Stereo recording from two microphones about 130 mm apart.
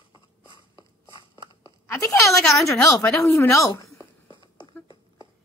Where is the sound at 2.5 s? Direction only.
25° left (ahead or behind).